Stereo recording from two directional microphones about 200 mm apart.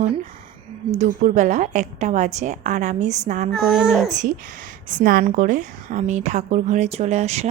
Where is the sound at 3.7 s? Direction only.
5° right (ahead or behind).